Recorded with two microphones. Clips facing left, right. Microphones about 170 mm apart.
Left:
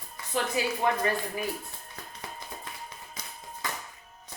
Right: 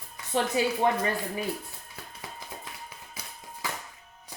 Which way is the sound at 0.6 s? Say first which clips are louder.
Right 3 dB; 25° right (ahead or behind).